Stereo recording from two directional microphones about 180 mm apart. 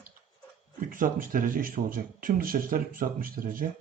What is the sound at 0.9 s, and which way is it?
Speech, 50° right (ahead or behind).